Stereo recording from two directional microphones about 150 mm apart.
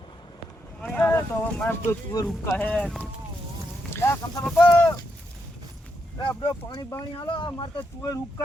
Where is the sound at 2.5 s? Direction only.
10° left (ahead or behind).